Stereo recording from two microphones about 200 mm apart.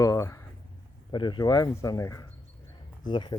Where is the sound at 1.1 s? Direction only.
25° left (ahead or behind).